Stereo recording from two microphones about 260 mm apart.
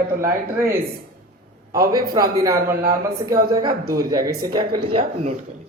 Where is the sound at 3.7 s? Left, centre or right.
Right.